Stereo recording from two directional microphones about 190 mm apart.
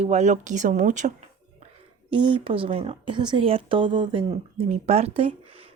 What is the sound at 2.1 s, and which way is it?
Speech, 25° right (ahead or behind).